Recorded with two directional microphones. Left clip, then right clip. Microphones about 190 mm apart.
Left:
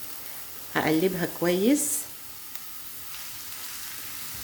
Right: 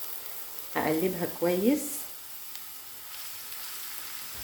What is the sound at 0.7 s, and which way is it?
Speech, 50° left (ahead or behind).